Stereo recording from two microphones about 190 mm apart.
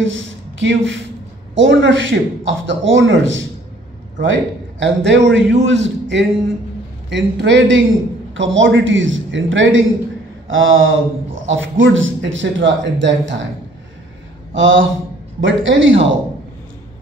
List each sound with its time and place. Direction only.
0.0 s a man's voice: 85° right
14.5 s a man's voice: 80° right